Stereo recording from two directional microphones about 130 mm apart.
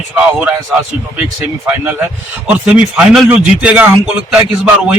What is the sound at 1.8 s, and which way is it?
A man's voice, 15° right (ahead or behind).